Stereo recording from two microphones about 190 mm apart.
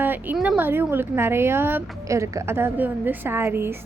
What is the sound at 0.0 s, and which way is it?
A woman's voice, 10° right (ahead or behind).